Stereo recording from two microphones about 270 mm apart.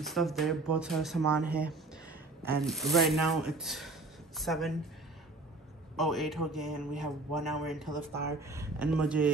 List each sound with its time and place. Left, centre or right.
0.0 s a man's voice: centre
5.9 s a man's voice: centre